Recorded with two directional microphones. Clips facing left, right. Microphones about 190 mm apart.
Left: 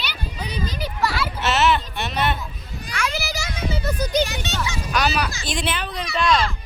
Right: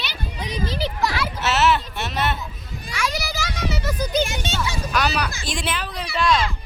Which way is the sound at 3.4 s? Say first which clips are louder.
Right 1 dB; 85° right.